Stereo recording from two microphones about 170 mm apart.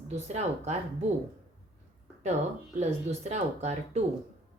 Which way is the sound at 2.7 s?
40° right (ahead or behind).